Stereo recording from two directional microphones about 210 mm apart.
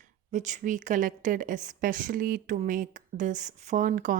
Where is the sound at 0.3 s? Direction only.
35° right (ahead or behind).